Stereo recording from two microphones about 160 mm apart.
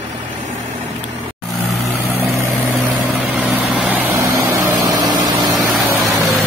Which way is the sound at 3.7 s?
10° right (ahead or behind).